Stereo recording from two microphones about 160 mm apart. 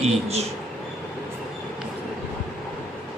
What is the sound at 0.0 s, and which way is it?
Speech, 40° right (ahead or behind).